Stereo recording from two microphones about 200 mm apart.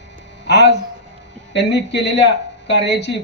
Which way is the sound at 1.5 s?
60° left (ahead or behind).